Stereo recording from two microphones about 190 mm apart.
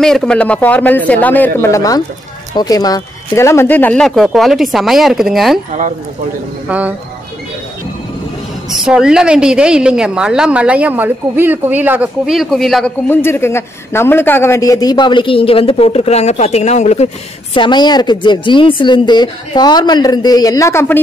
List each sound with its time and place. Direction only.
0.0 s a man's voice: 5° left (ahead or behind)
5.7 s speech: 40° right (ahead or behind)
6.7 s speech: 10° right (ahead or behind)
8.6 s a woman's voice: centre (ahead or behind)
13.1 s a man's voice: 15° left (ahead or behind); by 17.1 s 35° left (ahead or behind)
17.6 s a man's voice: 25° left (ahead or behind)